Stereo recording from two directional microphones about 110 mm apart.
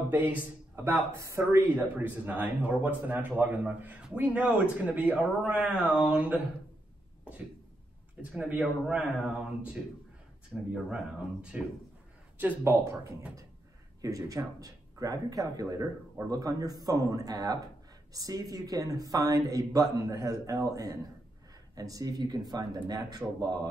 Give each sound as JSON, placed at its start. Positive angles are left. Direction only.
{"t": 0.7, "sound": "a man's voice", "side_deg": -25}
{"t": 8.2, "sound": "a man's voice", "side_deg": -10}
{"t": 10.5, "sound": "speech", "side_deg": 0}
{"t": 11.5, "sound": "a man's voice", "side_deg": -10}
{"t": 14.0, "sound": "speech", "side_deg": -30}